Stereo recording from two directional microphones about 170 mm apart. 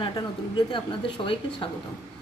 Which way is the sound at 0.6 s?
30° left (ahead or behind).